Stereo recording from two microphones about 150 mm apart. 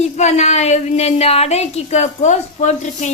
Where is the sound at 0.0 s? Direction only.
50° left (ahead or behind).